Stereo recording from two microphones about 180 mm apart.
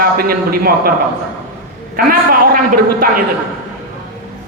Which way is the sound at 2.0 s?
55° right (ahead or behind).